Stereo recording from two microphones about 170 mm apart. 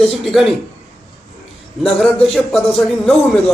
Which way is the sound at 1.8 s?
5° left (ahead or behind).